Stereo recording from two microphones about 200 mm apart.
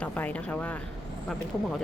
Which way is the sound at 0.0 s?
5° left (ahead or behind).